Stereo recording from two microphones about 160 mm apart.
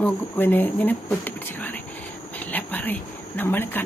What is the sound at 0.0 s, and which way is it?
Speech, 10° left (ahead or behind).